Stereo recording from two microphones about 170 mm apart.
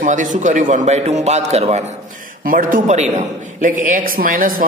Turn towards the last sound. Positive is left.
turn(degrees=-55)  # may be behind; listen again after turning